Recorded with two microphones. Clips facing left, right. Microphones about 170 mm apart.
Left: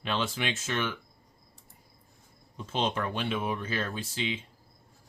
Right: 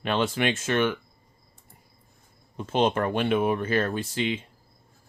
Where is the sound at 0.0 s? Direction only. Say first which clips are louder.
Right 6 dB; 55° right (ahead or behind).